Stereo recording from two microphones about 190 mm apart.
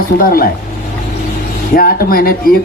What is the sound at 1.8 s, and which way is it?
Speech, 50° left (ahead or behind).